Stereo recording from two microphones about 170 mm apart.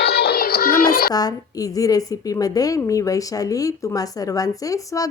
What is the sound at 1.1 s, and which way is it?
A woman's voice, 20° left (ahead or behind).